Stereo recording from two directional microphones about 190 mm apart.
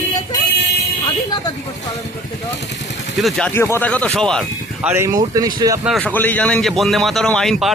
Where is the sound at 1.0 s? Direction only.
20° left (ahead or behind).